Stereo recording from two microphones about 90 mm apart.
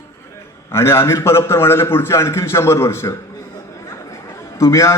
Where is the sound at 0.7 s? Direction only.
30° left (ahead or behind).